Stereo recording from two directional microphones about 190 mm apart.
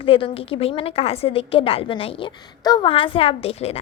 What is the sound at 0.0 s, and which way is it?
A woman's voice, 30° left (ahead or behind).